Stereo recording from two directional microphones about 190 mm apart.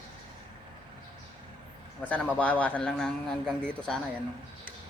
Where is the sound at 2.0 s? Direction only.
5° left (ahead or behind).